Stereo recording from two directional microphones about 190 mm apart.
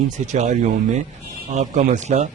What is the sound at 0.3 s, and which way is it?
Speech, 40° right (ahead or behind).